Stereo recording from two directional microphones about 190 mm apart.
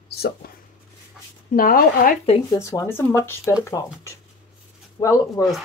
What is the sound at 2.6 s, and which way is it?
Speech, 15° left (ahead or behind).